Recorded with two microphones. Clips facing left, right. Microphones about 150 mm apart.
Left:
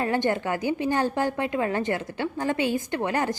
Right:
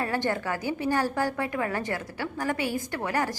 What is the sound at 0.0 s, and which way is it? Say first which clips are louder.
A woman's voice: left 3 dB; 20° left (ahead or behind).